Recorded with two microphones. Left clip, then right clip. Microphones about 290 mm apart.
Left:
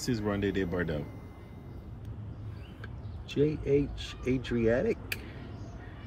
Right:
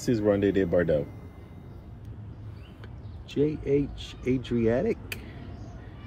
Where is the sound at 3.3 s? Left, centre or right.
Right.